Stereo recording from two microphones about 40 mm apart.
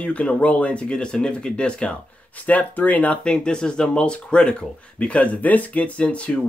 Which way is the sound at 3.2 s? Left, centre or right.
Left.